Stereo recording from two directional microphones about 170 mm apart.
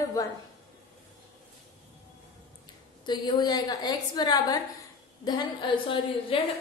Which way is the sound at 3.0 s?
25° left (ahead or behind).